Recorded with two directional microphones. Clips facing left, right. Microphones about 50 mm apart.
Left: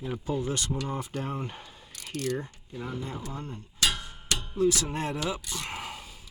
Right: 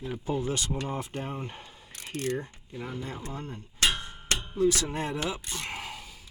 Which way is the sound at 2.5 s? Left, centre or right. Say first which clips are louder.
Left 1 dB; right.